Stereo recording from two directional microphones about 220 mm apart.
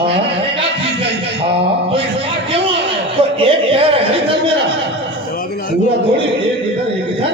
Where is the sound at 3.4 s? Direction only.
25° right (ahead or behind).